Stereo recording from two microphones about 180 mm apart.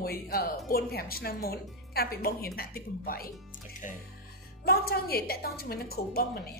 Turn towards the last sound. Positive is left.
turn(degrees=55)  # may be behind; listen again after turning